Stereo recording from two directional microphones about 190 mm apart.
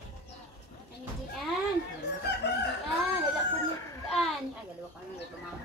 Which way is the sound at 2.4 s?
65° left (ahead or behind).